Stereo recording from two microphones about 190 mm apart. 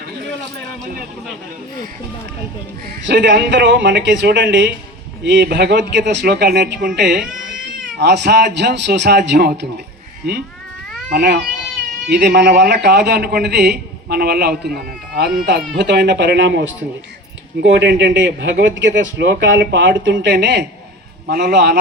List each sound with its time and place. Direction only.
3.0 s a man's voice: 70° right (ahead or behind)
11.1 s a man's voice: 60° right (ahead or behind)